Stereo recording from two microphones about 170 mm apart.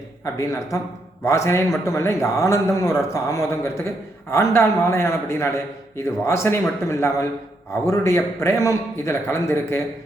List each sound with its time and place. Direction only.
0.3 s a man's voice: 20° left (ahead or behind)